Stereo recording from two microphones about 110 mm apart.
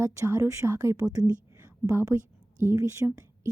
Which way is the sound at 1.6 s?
25° right (ahead or behind).